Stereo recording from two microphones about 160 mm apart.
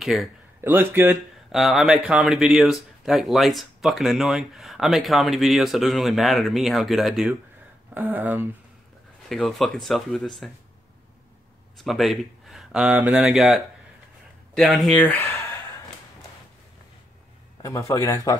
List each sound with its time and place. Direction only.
0.0 s a man's voice: centre (ahead or behind)
0.6 s speech: 15° right (ahead or behind)
9.3 s speech: centre (ahead or behind)
11.8 s speech: centre (ahead or behind)
14.6 s speech: centre (ahead or behind)
17.6 s a man's voice: 20° left (ahead or behind)